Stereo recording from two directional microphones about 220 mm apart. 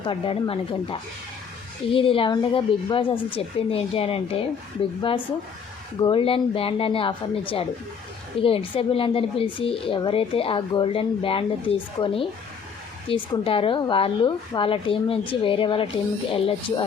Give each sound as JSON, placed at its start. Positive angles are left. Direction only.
{"t": 0.0, "sound": "a woman's voice", "side_deg": 25}
{"t": 6.0, "sound": "a woman's voice", "side_deg": 25}